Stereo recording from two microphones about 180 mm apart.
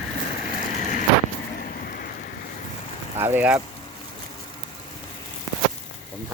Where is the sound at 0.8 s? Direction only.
50° left (ahead or behind).